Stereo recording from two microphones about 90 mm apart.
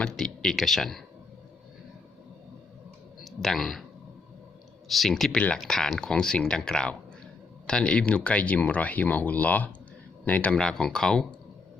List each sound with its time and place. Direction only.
0.0 s speech: 5° left (ahead or behind)
3.2 s speech: centre (ahead or behind)
4.9 s speech: centre (ahead or behind)